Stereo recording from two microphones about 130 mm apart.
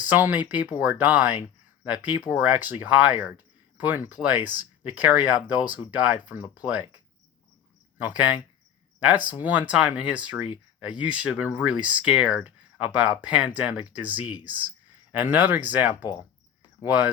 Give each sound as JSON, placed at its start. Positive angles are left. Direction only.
{"t": 0.1, "sound": "speech", "side_deg": -15}
{"t": 7.9, "sound": "speech", "side_deg": -10}